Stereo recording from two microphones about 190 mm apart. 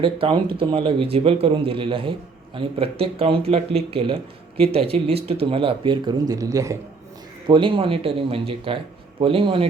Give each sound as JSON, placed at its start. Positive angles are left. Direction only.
{"t": 0.0, "sound": "speech", "side_deg": -25}